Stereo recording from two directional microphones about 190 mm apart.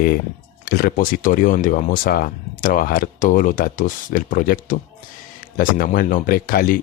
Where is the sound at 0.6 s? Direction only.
50° left (ahead or behind).